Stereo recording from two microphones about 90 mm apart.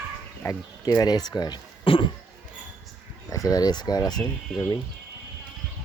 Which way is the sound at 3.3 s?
40° left (ahead or behind).